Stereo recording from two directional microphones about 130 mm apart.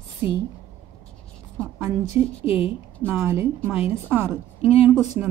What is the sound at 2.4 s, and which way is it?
Speech, 50° left (ahead or behind).